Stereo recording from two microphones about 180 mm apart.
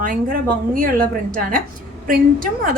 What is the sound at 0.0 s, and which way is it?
Speech, 50° right (ahead or behind).